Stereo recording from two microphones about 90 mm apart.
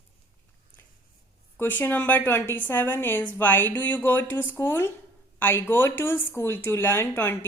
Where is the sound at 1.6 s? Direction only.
20° left (ahead or behind).